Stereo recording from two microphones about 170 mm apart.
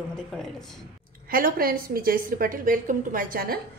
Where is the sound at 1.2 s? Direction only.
55° right (ahead or behind).